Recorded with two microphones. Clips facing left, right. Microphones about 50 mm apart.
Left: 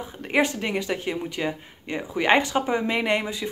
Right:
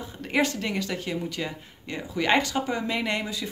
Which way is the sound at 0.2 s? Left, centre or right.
Centre.